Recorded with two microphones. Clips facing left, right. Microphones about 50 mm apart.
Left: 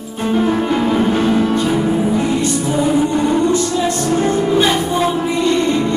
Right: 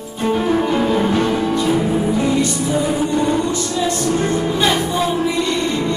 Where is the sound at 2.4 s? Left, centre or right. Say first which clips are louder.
Left 1 dB; left.